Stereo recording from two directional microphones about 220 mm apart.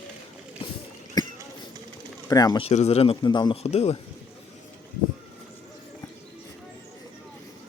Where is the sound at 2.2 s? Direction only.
15° left (ahead or behind).